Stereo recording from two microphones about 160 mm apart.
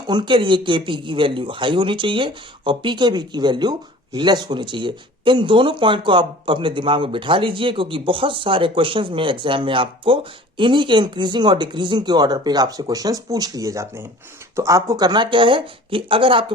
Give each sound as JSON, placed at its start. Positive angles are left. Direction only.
{"t": 0.1, "sound": "a man's voice", "side_deg": -30}